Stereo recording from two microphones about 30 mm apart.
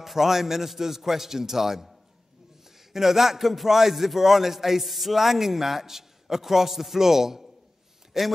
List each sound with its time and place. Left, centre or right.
0.0 s a man's voice: centre
2.9 s a man's voice: centre